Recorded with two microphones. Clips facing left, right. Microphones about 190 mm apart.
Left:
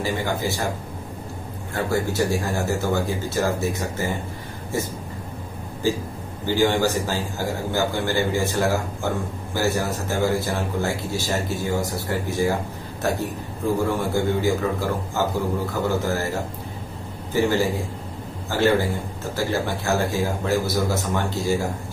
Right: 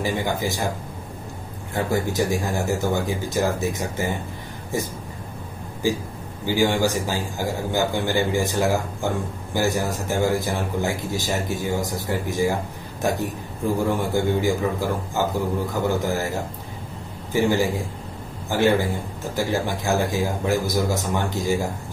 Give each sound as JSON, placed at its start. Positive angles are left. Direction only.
{"t": 0.0, "sound": "a man's voice", "side_deg": -15}
{"t": 1.7, "sound": "a man's voice", "side_deg": -15}
{"t": 5.8, "sound": "a man's voice", "side_deg": -15}